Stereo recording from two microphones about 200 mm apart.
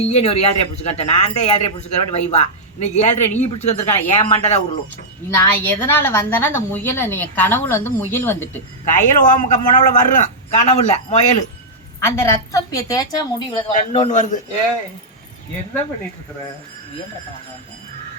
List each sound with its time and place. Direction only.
0.0 s speech: 35° left (ahead or behind)
5.3 s a woman's voice: 10° left (ahead or behind)
9.0 s speech: 40° left (ahead or behind)
11.9 s a woman's voice: 15° left (ahead or behind)
13.7 s speech: 35° left (ahead or behind)